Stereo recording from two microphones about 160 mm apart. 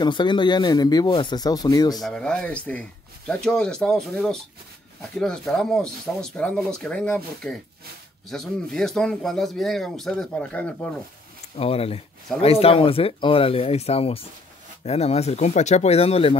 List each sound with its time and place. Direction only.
0.0 s speech: 30° left (ahead or behind)
2.0 s speech: 5° left (ahead or behind)
11.5 s speech: 40° left (ahead or behind)